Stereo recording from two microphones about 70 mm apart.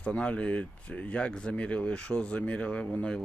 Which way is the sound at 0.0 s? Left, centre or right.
Centre.